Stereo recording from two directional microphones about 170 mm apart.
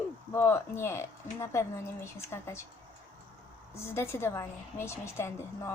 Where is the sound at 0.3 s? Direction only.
15° left (ahead or behind).